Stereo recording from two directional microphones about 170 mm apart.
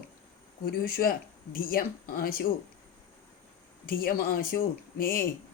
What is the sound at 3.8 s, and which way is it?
Speech, 60° left (ahead or behind).